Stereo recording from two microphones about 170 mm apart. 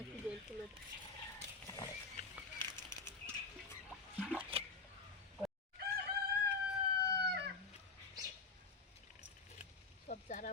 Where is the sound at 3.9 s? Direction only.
5° left (ahead or behind).